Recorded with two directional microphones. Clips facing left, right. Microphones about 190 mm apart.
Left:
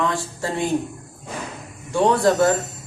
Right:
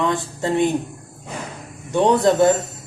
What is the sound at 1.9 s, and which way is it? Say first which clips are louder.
Speech: right 2 dB; 20° right (ahead or behind).